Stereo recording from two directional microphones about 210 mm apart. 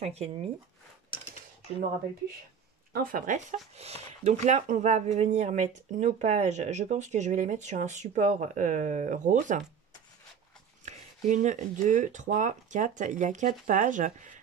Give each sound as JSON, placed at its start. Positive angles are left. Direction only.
{"t": 0.0, "sound": "speech", "side_deg": -30}
{"t": 2.9, "sound": "speech", "side_deg": -40}
{"t": 10.9, "sound": "speech", "side_deg": -35}